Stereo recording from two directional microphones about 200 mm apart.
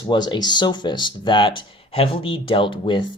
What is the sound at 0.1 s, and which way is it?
Speech, 20° left (ahead or behind).